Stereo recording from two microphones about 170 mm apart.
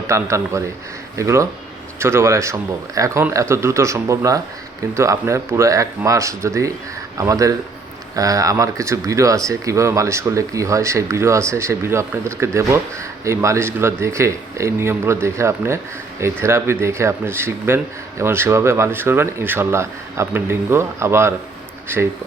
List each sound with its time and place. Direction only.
0.1 s speech: 15° right (ahead or behind)